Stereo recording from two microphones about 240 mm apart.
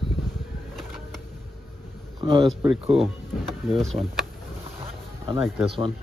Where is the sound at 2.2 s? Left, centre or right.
Right.